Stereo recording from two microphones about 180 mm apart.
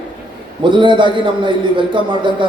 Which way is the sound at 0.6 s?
25° right (ahead or behind).